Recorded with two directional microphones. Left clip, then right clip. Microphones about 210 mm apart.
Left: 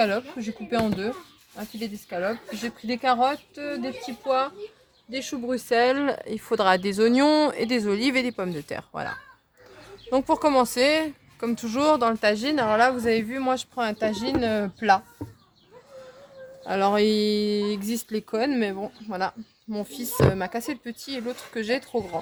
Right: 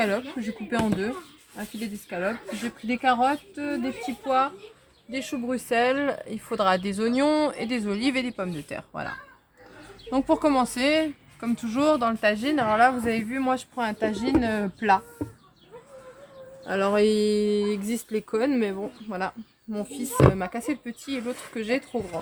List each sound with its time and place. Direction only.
0.0 s speech: 35° left (ahead or behind)
2.0 s a woman's voice: 40° left (ahead or behind)
16.6 s a woman's voice: 50° left (ahead or behind)